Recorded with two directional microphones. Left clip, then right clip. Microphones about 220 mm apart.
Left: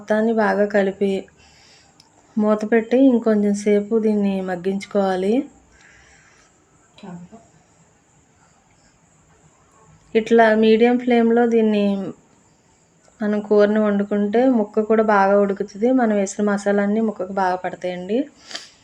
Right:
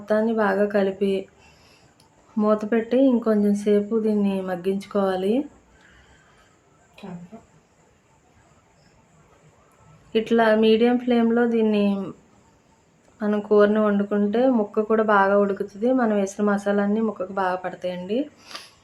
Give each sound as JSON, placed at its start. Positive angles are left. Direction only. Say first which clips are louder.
{"t": 0.0, "sound": "speech", "louder": "left 3 dB", "side_deg": 15}
{"t": 10.1, "sound": "speech", "louder": "left 4 dB", "side_deg": 15}
{"t": 13.1, "sound": "speech", "louder": "left 2 dB", "side_deg": 10}